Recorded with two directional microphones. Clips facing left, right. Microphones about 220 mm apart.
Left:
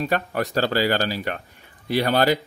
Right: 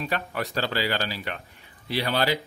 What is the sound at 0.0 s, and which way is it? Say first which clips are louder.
Speech: left 6 dB; 45° left (ahead or behind).